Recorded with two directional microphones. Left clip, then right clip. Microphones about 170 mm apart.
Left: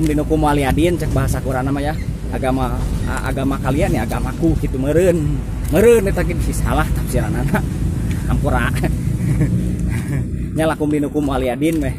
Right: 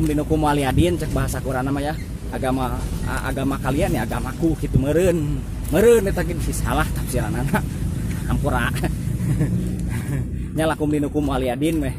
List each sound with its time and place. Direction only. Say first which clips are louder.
0.1 s speech: left 2 dB; 20° right (ahead or behind)
10.6 s speech: left 3 dB; 15° right (ahead or behind)